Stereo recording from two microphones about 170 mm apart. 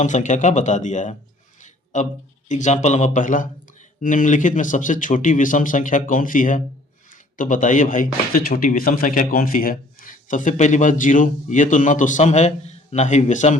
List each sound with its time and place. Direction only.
0.0 s speech: 45° left (ahead or behind)
1.6 s a sound: 45° left (ahead or behind)
2.5 s speech: 45° left (ahead or behind)